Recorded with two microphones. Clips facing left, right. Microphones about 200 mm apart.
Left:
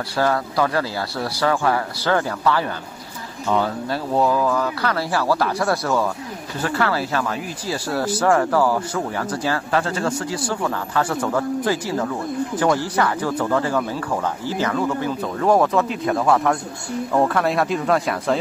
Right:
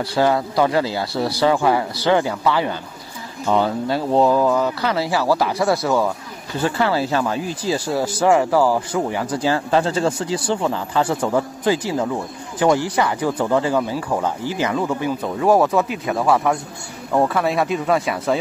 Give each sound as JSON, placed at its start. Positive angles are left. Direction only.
{"t": 0.2, "sound": "speech", "side_deg": -20}
{"t": 6.6, "sound": "speech", "side_deg": -25}